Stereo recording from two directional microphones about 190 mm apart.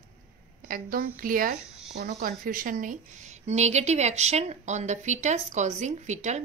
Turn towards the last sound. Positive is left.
turn(degrees=-40)  # may be behind; listen again after turning